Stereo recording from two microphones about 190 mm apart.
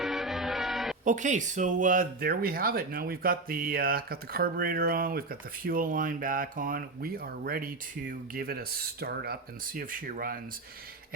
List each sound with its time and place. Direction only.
0.0 s music: centre (ahead or behind)
1.0 s speech: 40° right (ahead or behind)